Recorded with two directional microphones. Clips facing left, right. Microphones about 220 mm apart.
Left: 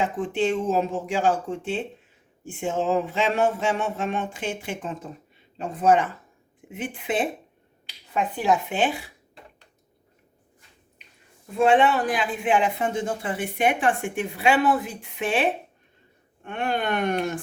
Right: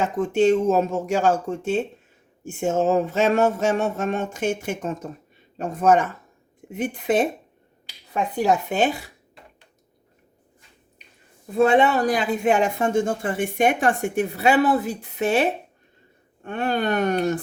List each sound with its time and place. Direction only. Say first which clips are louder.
0.0 s speech: right 5 dB; 40° right (ahead or behind)
8.4 s speech: right 3 dB; 40° right (ahead or behind)
11.5 s speech: right 2 dB; 40° right (ahead or behind)